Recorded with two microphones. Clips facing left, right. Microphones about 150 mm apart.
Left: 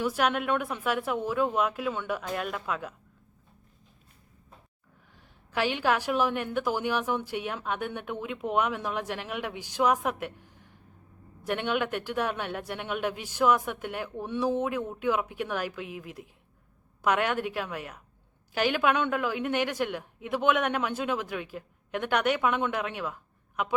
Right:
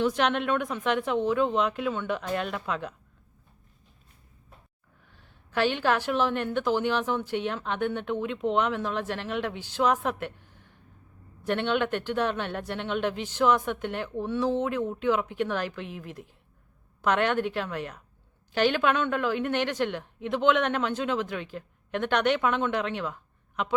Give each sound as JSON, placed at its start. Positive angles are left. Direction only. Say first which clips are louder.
{"t": 0.0, "sound": "a woman's voice", "louder": "right 2 dB", "side_deg": 10}
{"t": 5.1, "sound": "a woman's voice", "louder": "right 2 dB", "side_deg": 10}